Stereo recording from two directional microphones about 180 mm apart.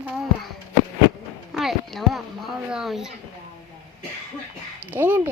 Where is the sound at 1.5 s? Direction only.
Centre (ahead or behind).